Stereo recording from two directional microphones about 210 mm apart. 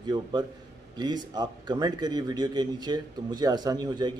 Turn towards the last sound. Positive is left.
turn(degrees=-20)  # may be behind; listen again after turning